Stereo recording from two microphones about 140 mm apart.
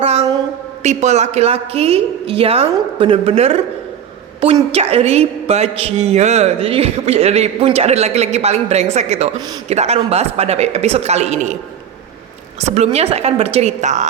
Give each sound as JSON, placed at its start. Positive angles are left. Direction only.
{"t": 0.0, "sound": "a sound", "side_deg": -45}
{"t": 0.8, "sound": "a woman's voice", "side_deg": -55}
{"t": 4.7, "sound": "a woman's voice", "side_deg": -45}
{"t": 12.5, "sound": "a woman's voice", "side_deg": -50}